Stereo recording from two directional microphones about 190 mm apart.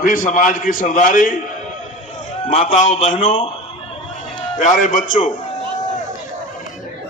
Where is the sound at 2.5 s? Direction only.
40° left (ahead or behind).